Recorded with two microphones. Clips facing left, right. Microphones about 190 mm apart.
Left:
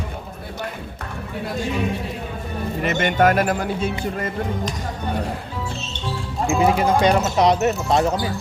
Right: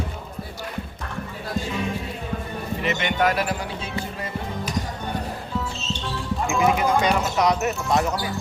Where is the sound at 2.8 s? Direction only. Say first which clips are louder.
Left 5 dB; 45° left (ahead or behind).